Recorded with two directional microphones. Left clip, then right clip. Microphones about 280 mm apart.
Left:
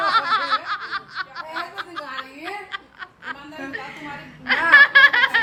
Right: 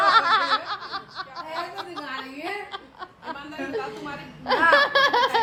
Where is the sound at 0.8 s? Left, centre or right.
Centre.